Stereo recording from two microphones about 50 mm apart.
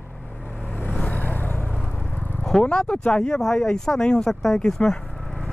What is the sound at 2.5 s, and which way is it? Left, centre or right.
Speech, centre.